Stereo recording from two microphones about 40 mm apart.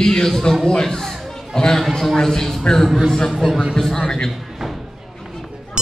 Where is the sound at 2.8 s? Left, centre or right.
Centre.